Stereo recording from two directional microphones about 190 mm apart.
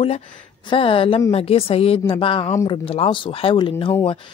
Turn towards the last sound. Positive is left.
turn(degrees=25)  # may be behind; listen again after turning